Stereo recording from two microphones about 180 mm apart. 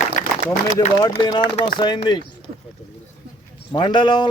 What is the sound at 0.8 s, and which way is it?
Speech, 20° left (ahead or behind).